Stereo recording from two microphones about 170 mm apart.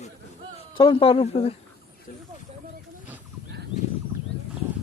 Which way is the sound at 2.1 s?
55° left (ahead or behind).